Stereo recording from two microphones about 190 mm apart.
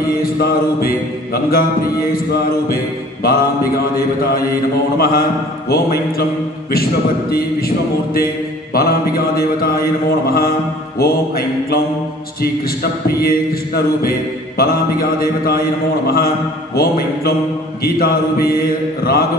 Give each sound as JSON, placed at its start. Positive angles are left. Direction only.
{"t": 0.1, "sound": "mantra", "side_deg": 50}
{"t": 3.2, "sound": "mantra", "side_deg": 50}
{"t": 4.9, "sound": "mantra", "side_deg": 55}
{"t": 13.2, "sound": "mantra", "side_deg": 50}